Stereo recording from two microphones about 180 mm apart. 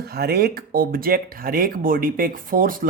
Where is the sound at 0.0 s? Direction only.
60° right (ahead or behind).